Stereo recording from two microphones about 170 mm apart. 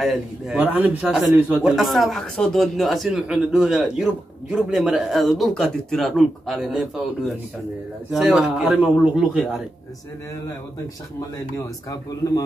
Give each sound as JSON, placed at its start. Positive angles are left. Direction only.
{"t": 0.0, "sound": "speech", "side_deg": 0}
{"t": 8.1, "sound": "speech", "side_deg": 0}